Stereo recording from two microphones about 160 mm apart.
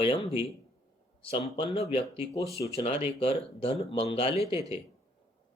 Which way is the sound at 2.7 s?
40° left (ahead or behind).